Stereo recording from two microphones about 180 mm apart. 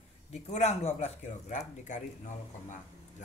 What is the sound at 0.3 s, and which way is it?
Speech, 40° left (ahead or behind).